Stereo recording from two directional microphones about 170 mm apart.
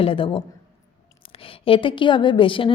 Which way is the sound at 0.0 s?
30° left (ahead or behind).